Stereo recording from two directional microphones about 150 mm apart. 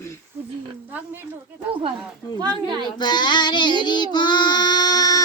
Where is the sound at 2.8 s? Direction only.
30° left (ahead or behind).